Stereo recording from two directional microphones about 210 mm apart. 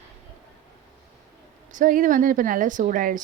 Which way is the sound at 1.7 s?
40° right (ahead or behind).